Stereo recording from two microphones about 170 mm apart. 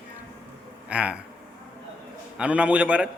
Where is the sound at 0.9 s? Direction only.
5° right (ahead or behind).